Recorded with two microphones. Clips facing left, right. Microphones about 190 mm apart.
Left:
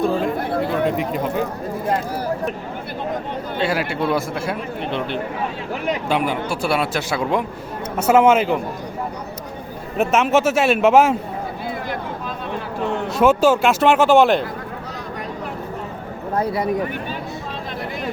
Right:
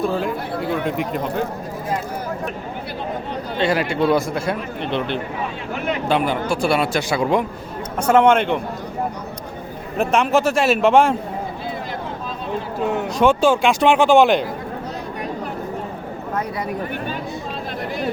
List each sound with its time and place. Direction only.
0.0 s a man's voice: centre (ahead or behind)
3.6 s a man's voice: 5° left (ahead or behind)
10.0 s a man's voice: centre (ahead or behind)
13.1 s a man's voice: 5° left (ahead or behind)